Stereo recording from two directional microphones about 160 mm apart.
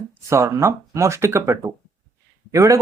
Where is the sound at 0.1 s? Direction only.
15° right (ahead or behind).